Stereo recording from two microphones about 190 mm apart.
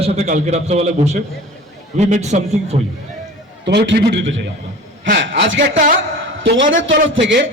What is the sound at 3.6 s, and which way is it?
A man's voice, 65° right (ahead or behind).